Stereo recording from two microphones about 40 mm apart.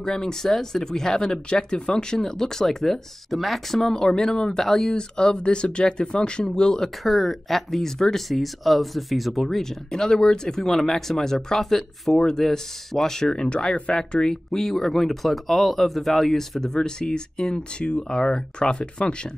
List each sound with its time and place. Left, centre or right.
0.0 s speech: centre
3.9 s speech: centre
4.9 s speech: left
7.0 s speech: centre; by 19.3 s left